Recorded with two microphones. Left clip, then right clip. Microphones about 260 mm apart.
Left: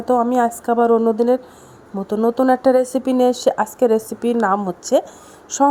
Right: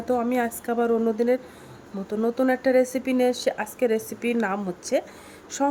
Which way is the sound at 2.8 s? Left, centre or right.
Centre.